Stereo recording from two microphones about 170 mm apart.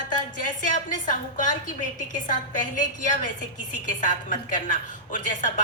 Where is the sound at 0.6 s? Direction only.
50° left (ahead or behind).